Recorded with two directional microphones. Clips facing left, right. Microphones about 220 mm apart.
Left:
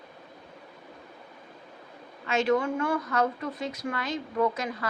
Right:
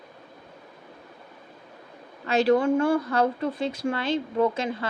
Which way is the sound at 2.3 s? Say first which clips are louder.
Right 5 dB; 35° right (ahead or behind).